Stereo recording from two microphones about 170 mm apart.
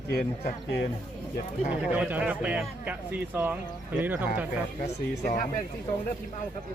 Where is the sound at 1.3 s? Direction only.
40° left (ahead or behind).